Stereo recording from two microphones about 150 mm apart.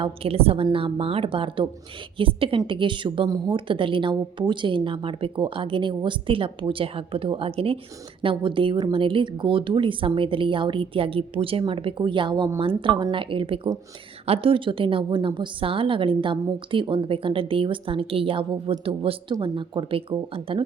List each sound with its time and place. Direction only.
0.0 s a woman's voice: 40° right (ahead or behind)